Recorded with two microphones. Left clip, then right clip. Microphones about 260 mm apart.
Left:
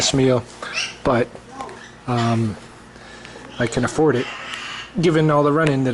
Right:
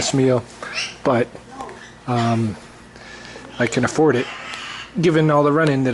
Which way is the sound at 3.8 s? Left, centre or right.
Centre.